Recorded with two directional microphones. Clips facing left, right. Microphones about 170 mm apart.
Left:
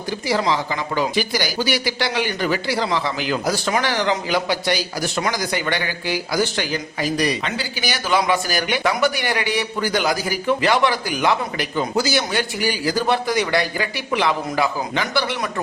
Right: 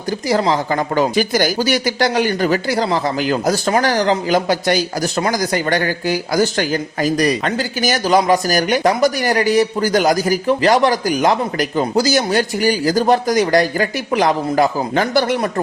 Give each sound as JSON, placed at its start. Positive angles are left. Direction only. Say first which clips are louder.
{"t": 0.3, "sound": "speech", "louder": "right 4 dB", "side_deg": -45}